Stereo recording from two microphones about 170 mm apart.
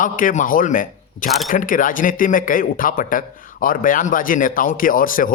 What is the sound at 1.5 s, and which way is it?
Speech, 50° left (ahead or behind).